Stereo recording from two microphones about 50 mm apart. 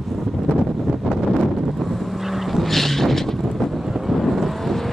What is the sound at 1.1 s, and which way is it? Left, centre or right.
Vehicle, centre.